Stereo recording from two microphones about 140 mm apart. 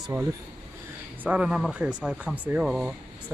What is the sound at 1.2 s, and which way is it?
Speech, 5° right (ahead or behind).